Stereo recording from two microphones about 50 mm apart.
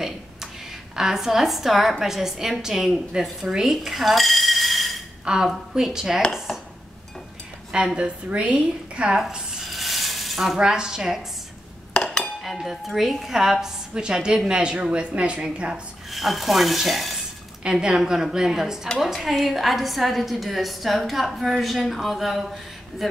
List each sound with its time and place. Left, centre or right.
0.9 s a woman's voice: centre
5.2 s a woman's voice: centre
7.7 s a woman's voice: centre
9.6 s a sound: centre
11.9 s cutlery: centre
12.4 s a woman's voice: centre; by 15.4 s right
15.4 s speech: centre
17.6 s a woman's voice: centre
19.1 s a woman's voice: centre